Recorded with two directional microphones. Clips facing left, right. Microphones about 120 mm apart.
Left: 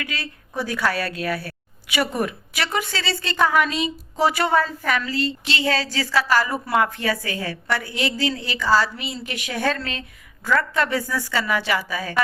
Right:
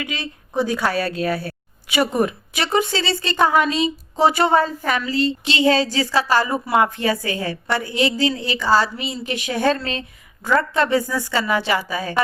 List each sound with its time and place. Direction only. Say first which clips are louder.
0.0 s a woman's voice: right 3 dB; 20° right (ahead or behind)